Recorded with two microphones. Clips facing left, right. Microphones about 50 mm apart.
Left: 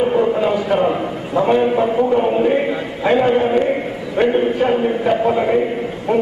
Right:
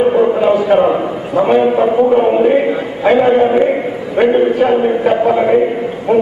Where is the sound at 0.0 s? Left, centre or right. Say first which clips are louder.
Right 5 dB; centre.